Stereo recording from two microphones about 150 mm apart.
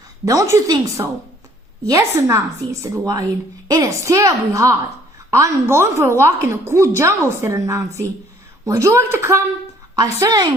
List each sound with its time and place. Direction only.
0.3 s a woman's voice: 20° right (ahead or behind)